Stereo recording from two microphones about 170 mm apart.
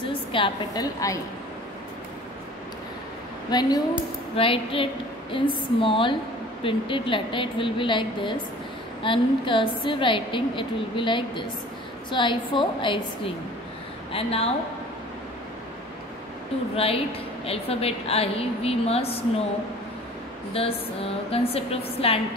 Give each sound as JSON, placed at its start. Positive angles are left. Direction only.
{"t": 0.0, "sound": "a woman's voice", "side_deg": 30}
{"t": 3.4, "sound": "a woman's voice", "side_deg": 25}
{"t": 14.1, "sound": "a woman's voice", "side_deg": 35}
{"t": 16.7, "sound": "a woman's voice", "side_deg": 35}
{"t": 20.5, "sound": "a woman's voice", "side_deg": 35}